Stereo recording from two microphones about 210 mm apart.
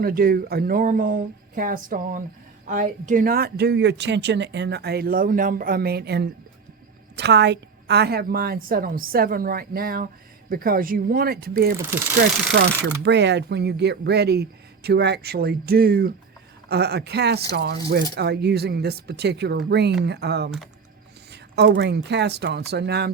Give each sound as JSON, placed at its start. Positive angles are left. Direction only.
{"t": 0.0, "sound": "a woman's voice", "side_deg": -45}
{"t": 21.5, "sound": "a woman's voice", "side_deg": -50}